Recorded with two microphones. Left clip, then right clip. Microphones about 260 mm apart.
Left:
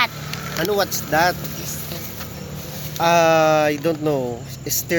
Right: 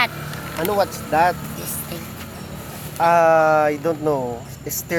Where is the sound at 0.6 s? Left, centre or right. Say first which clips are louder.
Right 1 dB; centre.